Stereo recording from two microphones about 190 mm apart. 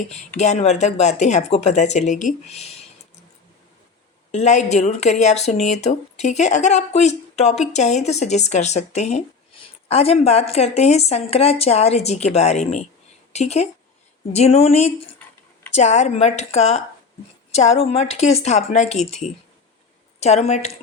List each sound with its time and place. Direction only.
0.3 s speech: 35° left (ahead or behind)
4.3 s speech: 35° left (ahead or behind)